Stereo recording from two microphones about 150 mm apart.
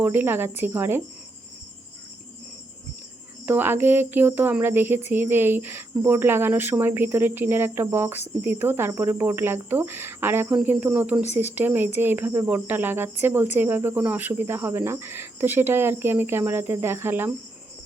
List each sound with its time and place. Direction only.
0.0 s speech: 15° right (ahead or behind)
3.4 s speech: 15° right (ahead or behind)